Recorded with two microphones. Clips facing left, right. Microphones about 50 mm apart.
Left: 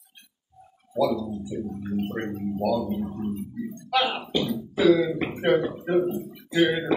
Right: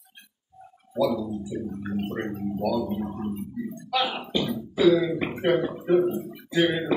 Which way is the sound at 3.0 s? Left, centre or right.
Centre.